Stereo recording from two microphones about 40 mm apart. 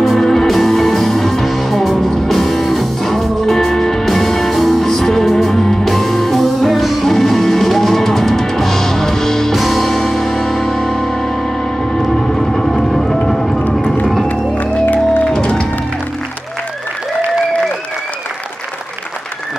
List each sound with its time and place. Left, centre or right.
0.0 s music: centre
11.9 s vehicle: centre
15.2 s music: left